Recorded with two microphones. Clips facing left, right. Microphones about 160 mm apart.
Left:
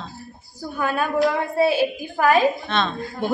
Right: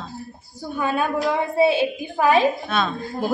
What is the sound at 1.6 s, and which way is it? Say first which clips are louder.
Speech: right 1 dB; 20° right (ahead or behind).